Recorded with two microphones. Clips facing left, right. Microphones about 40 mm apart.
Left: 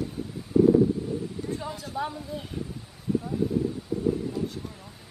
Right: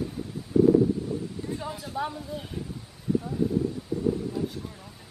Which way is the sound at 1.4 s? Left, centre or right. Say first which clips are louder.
Left 1 dB; centre.